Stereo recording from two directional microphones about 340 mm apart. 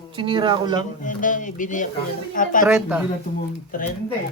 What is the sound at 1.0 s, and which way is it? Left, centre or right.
Speech, left.